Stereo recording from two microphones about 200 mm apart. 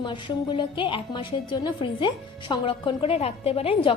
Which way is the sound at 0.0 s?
25° left (ahead or behind).